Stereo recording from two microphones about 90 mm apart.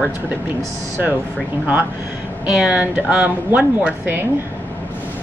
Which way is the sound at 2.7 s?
15° right (ahead or behind).